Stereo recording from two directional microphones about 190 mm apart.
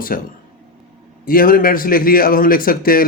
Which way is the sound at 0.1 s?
50° left (ahead or behind).